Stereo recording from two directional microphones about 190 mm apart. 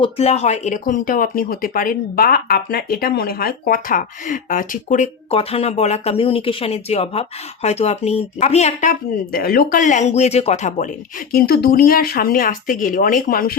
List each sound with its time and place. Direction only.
0.0 s speech: 35° left (ahead or behind)
11.3 s speech: 55° left (ahead or behind)